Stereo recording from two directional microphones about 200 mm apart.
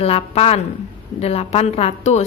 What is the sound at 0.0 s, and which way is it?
Speech, 30° left (ahead or behind).